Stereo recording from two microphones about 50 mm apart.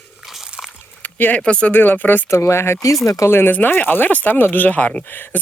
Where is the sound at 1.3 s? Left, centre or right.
Left.